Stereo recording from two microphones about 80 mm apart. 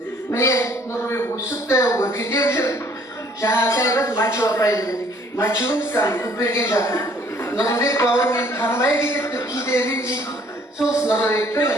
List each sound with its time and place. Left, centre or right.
0.3 s a woman's voice: left